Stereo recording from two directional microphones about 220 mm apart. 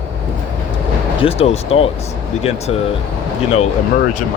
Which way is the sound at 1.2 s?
25° left (ahead or behind).